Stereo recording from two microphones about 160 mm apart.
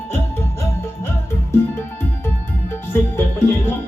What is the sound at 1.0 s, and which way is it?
Music, 15° left (ahead or behind).